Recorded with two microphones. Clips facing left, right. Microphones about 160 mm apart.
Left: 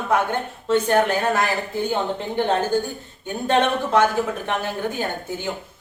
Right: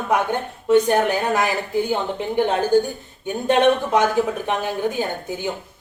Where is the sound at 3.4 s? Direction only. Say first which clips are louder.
Right 3 dB; 15° right (ahead or behind).